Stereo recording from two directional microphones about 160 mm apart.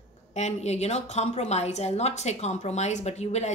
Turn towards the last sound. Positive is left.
turn(degrees=45)  # may be behind; listen again after turning